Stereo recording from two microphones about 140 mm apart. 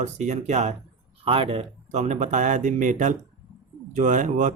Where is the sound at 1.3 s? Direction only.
40° right (ahead or behind).